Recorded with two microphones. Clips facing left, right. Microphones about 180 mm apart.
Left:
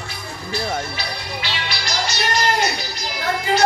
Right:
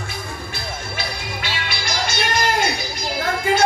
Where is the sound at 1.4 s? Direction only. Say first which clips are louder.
Right 1 dB; 55° right (ahead or behind).